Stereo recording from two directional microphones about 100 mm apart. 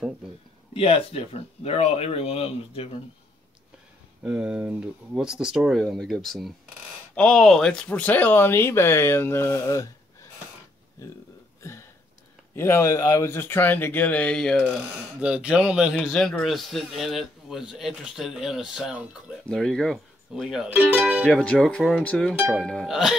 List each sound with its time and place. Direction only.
0.7 s speech: 80° left
4.2 s speech: 10° right (ahead or behind); by 9.8 s 30° left (ahead or behind)
11.6 s a sound: 25° left (ahead or behind)
12.5 s speech: 25° left (ahead or behind); by 14.7 s 5° left (ahead or behind)
15.1 s a man's voice: 10° right (ahead or behind)
19.4 s speech: 5° left (ahead or behind)
20.7 s speech: 15° right (ahead or behind)
21.2 s a man's voice: 5° left (ahead or behind)